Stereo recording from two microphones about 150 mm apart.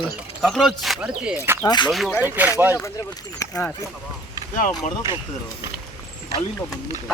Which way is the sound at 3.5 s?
10° left (ahead or behind).